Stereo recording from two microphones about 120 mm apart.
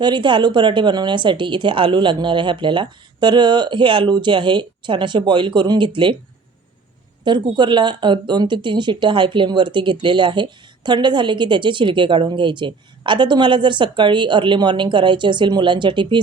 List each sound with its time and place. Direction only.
0.0 s speech: 40° right (ahead or behind)
7.3 s speech: 40° right (ahead or behind)